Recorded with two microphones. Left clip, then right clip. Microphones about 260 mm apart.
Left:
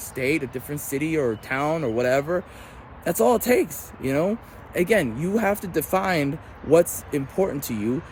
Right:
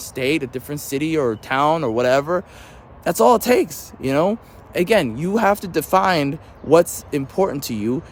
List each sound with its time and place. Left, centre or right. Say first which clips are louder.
0.1 s speech: right 3 dB; right
1.2 s speech: right 5 dB; centre
1.6 s speech: right 7 dB; right
2.0 s speech: right 5 dB; centre
7.7 s speech: right 3 dB; right